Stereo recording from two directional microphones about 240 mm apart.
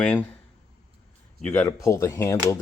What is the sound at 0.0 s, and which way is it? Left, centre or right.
Speech, centre.